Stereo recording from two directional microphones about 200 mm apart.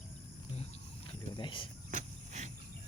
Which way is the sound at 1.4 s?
25° left (ahead or behind).